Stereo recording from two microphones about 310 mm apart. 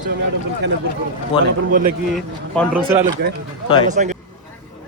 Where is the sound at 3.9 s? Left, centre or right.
Right.